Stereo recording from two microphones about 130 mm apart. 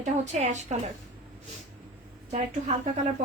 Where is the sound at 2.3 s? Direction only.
65° right (ahead or behind).